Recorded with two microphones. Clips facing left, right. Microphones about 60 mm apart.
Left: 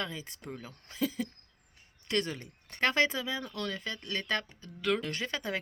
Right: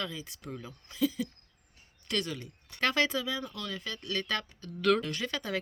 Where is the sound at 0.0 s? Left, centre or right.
Left.